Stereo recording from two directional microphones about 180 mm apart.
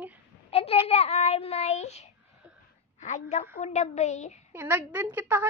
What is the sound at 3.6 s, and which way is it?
Child singing, 40° left (ahead or behind).